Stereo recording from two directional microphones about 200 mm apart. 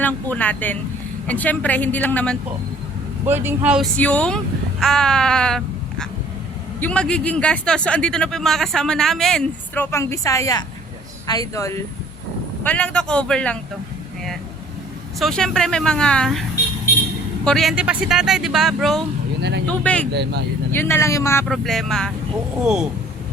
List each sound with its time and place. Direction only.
0.0 s speech: 10° left (ahead or behind)
3.2 s speech: 10° right (ahead or behind)
3.9 s speech: 5° left (ahead or behind)
4.8 s a sound: 5° left (ahead or behind)
6.7 s speech: 5° left (ahead or behind)
15.2 s speech: 5° left (ahead or behind)
17.4 s speech: centre (ahead or behind)
19.4 s speech: 60° right (ahead or behind)
19.6 s speech: 5° left (ahead or behind)
21.4 s speech: centre (ahead or behind)